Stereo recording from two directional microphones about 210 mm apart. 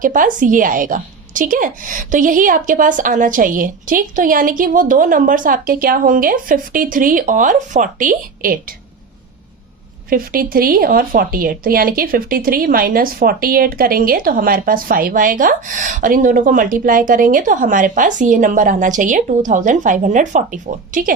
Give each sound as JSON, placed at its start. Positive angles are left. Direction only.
{"t": 0.0, "sound": "speech", "side_deg": -40}
{"t": 10.1, "sound": "speech", "side_deg": -45}